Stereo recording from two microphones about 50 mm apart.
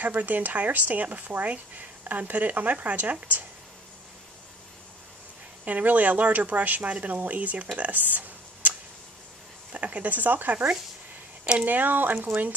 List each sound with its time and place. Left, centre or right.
0.0 s speech: right
5.7 s speech: right